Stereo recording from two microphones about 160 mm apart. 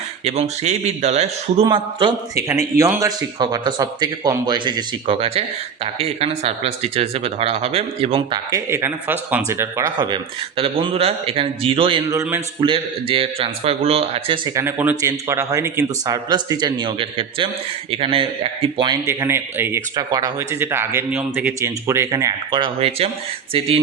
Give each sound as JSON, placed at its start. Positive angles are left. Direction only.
{"t": 0.3, "sound": "a man's voice", "side_deg": -40}
{"t": 1.6, "sound": "speech", "side_deg": -30}
{"t": 2.7, "sound": "speech", "side_deg": -20}
{"t": 8.4, "sound": "speech", "side_deg": -20}
{"t": 10.6, "sound": "speech", "side_deg": -35}
{"t": 12.0, "sound": "speech", "side_deg": -15}
{"t": 12.5, "sound": "speech", "side_deg": -30}
{"t": 14.5, "sound": "speech", "side_deg": -15}
{"t": 19.0, "sound": "speech", "side_deg": -15}
{"t": 20.0, "sound": "speech", "side_deg": -25}